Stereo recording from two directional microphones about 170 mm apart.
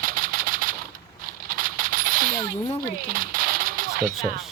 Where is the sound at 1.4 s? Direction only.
55° right (ahead or behind).